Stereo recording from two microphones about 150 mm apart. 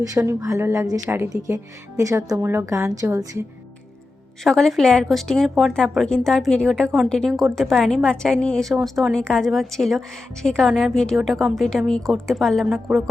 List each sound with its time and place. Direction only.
0.0 s a woman's voice: 20° right (ahead or behind)
4.4 s a woman's voice: centre (ahead or behind)